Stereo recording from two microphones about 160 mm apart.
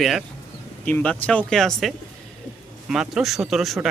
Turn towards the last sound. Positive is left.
turn(degrees=0)  # may be behind; listen again after turning